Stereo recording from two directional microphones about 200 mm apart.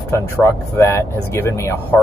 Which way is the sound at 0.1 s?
15° left (ahead or behind).